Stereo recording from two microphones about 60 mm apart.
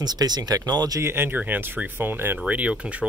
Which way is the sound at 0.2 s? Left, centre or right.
Right.